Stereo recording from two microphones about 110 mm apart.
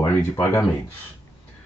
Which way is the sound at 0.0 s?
20° left (ahead or behind).